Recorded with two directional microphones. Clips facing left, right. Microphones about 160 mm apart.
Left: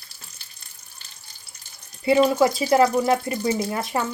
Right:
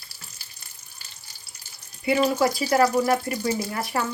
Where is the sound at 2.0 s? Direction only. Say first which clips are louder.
Left 4 dB; 25° left (ahead or behind).